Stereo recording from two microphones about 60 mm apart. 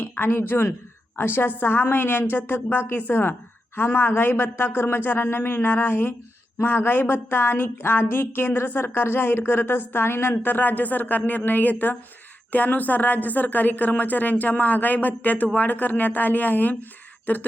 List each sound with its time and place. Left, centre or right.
0.0 s a woman's voice: left